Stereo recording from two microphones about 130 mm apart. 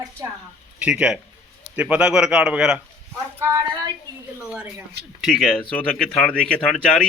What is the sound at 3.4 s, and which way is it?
Speech, 20° right (ahead or behind).